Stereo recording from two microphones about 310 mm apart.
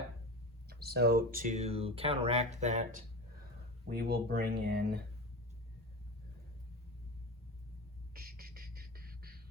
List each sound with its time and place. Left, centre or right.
0.7 s speech: right
8.1 s beatboxing: right